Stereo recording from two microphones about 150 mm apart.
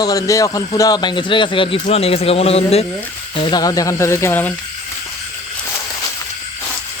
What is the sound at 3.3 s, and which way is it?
A man's voice, 30° left (ahead or behind).